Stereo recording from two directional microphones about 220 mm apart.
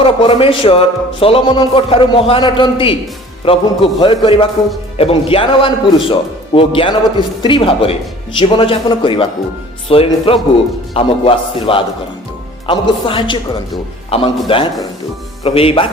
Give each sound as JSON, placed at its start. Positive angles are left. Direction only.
{"t": 0.0, "sound": "a man's voice", "side_deg": 25}